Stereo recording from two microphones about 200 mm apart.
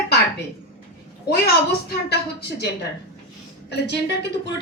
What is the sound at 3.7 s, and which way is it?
Speech, 55° left (ahead or behind).